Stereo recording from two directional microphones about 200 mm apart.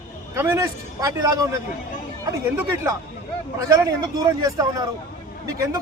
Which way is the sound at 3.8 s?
15° right (ahead or behind).